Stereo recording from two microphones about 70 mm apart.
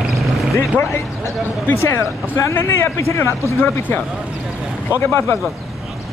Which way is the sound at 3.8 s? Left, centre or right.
Left.